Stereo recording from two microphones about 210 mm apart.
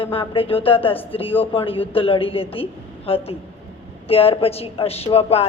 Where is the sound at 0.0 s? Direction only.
25° left (ahead or behind).